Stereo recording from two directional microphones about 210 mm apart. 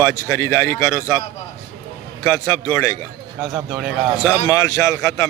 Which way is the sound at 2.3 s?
15° left (ahead or behind).